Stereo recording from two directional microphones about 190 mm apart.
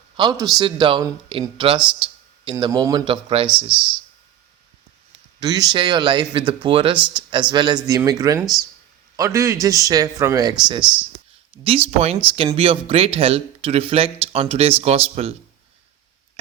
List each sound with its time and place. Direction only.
0.2 s speech: 20° right (ahead or behind)
3.5 s speech: 5° right (ahead or behind)
5.4 s a man's voice: 20° right (ahead or behind)
11.6 s speech: 30° right (ahead or behind)